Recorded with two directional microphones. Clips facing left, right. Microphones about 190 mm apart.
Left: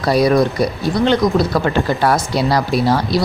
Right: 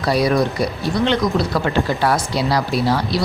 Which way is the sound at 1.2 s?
40° left (ahead or behind).